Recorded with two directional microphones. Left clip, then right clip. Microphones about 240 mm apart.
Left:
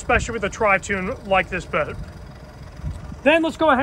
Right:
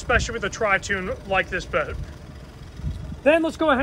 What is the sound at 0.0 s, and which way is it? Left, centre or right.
Speech, left.